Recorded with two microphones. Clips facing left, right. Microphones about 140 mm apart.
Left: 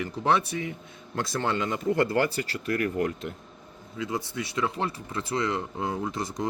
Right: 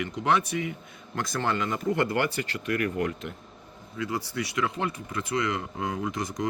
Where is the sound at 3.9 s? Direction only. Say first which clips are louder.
Right 1 dB; 20° left (ahead or behind).